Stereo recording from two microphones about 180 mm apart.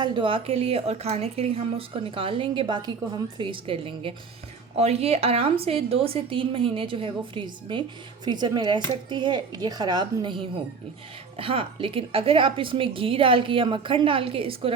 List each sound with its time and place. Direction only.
0.0 s a woman's voice: 25° right (ahead or behind)
11.3 s a woman's voice: 30° right (ahead or behind)